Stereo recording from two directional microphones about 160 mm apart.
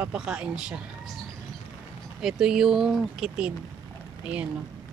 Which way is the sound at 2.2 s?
5° right (ahead or behind).